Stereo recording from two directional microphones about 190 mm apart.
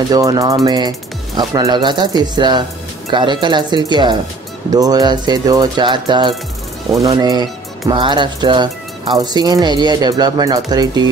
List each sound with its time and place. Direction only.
0.1 s speech: 20° right (ahead or behind)